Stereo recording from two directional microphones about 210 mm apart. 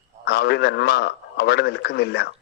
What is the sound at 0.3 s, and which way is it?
A man's voice, 50° left (ahead or behind).